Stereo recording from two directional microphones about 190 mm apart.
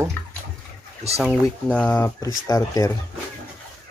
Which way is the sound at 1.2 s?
Centre (ahead or behind).